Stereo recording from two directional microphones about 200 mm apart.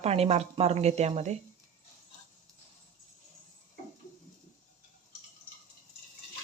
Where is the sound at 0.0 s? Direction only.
30° right (ahead or behind).